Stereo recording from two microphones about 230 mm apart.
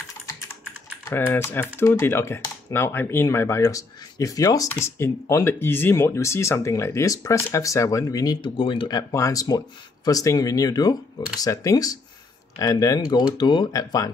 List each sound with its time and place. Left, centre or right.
1.0 s speech: centre